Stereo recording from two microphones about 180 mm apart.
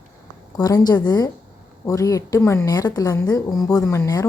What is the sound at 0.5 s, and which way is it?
A woman's voice, 20° left (ahead or behind).